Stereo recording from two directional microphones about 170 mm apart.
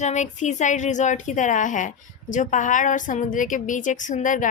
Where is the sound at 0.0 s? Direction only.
45° left (ahead or behind).